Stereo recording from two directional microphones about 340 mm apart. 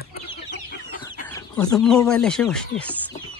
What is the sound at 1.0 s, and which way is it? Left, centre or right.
Speech, centre.